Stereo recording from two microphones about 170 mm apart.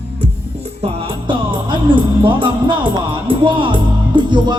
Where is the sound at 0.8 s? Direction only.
30° right (ahead or behind).